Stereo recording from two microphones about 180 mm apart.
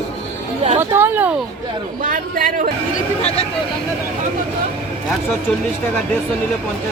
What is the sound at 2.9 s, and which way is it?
Speech, 35° left (ahead or behind).